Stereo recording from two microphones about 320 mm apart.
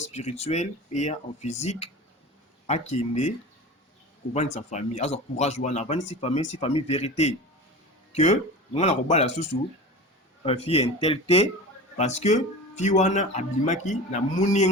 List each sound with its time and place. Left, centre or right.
0.1 s speech: centre
4.4 s speech: left